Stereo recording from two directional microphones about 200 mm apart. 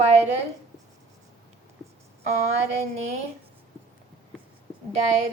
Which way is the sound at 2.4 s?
35° right (ahead or behind).